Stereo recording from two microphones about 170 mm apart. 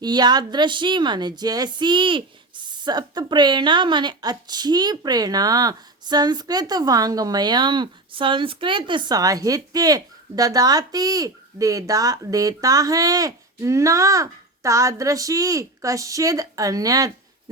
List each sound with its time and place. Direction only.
0.0 s a woman's voice: 25° right (ahead or behind)